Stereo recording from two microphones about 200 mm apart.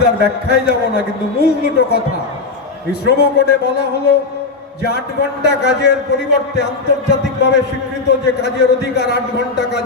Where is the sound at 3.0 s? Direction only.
60° left (ahead or behind).